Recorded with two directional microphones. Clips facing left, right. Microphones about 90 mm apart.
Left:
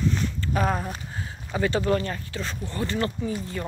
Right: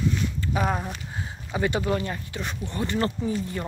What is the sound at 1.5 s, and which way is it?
A woman's voice, 15° right (ahead or behind).